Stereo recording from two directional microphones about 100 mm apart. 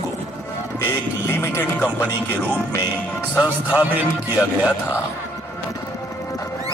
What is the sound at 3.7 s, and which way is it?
Speech, 15° right (ahead or behind).